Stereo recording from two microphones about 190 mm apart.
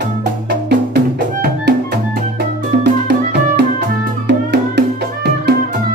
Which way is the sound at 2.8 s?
60° right (ahead or behind).